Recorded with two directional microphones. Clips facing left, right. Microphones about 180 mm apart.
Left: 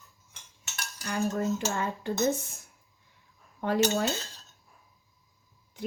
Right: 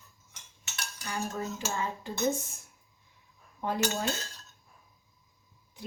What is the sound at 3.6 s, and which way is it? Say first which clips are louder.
Speech: left 5 dB; 70° left (ahead or behind).